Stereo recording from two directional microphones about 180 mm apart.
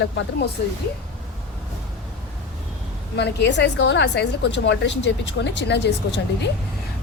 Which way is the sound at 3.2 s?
75° left (ahead or behind).